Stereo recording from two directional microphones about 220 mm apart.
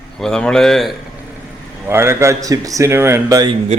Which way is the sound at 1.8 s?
10° right (ahead or behind).